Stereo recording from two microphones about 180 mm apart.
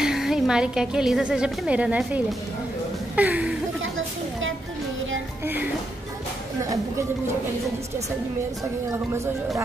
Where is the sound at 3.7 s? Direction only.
90° right.